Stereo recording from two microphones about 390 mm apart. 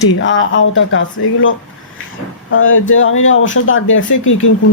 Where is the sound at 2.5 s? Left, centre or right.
Left.